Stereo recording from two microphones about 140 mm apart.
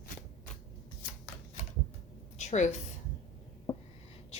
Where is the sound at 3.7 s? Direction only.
35° left (ahead or behind).